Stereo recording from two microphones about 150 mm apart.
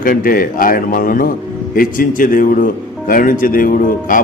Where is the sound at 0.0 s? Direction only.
65° left (ahead or behind).